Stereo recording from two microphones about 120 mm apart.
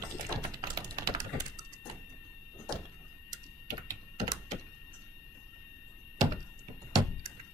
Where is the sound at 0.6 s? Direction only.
30° right (ahead or behind).